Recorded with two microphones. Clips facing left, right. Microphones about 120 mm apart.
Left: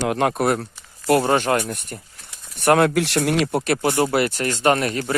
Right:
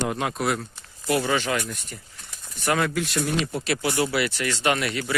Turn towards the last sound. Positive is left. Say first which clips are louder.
# left 5 dB
turn(degrees=40)  # may be behind; listen again after turning